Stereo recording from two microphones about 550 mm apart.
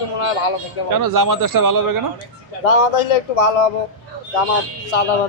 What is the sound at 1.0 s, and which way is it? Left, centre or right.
Speech, right.